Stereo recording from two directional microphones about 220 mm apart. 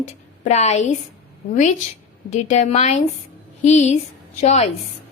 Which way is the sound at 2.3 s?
30° left (ahead or behind).